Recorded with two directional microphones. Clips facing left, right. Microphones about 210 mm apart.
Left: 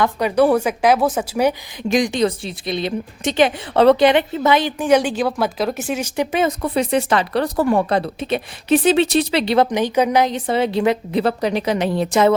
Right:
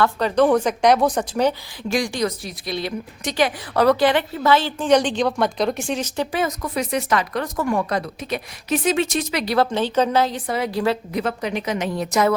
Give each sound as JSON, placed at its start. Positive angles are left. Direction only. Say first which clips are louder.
{"t": 0.0, "sound": "a woman's voice", "louder": "left 2 dB", "side_deg": 10}
{"t": 6.3, "sound": "speech", "louder": "left 6 dB", "side_deg": 25}